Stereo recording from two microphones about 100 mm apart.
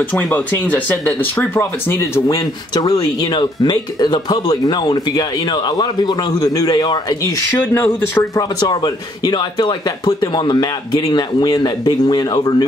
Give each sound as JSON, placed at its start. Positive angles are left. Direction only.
{"t": 0.0, "sound": "a man's voice", "side_deg": 15}
{"t": 7.7, "sound": "speech", "side_deg": 25}
{"t": 8.5, "sound": "speech", "side_deg": 45}